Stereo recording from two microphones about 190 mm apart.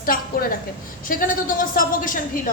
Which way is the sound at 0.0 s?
50° left (ahead or behind).